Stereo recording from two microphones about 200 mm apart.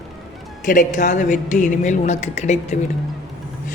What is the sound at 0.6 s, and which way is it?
A woman's voice, 40° left (ahead or behind).